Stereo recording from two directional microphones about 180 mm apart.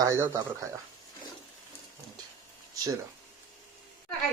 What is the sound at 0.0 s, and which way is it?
Speech, 20° right (ahead or behind).